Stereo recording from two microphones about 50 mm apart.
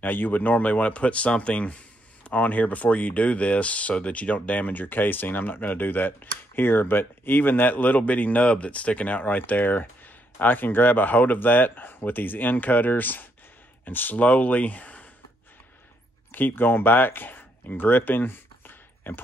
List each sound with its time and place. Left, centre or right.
0.0 s speech: left
16.3 s speech: left